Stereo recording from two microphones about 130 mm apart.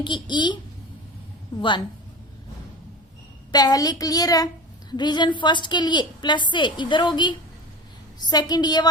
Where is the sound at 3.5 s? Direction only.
30° left (ahead or behind).